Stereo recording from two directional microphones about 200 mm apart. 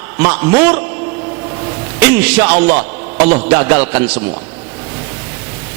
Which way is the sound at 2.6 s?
35° right (ahead or behind).